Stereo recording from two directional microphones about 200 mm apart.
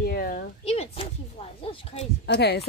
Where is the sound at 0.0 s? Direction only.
50° left (ahead or behind).